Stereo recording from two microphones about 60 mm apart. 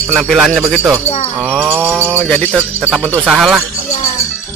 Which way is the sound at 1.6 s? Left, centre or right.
Right.